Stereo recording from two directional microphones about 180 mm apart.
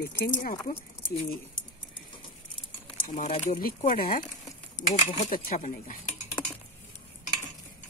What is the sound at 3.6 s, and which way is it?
Speech, 50° left (ahead or behind).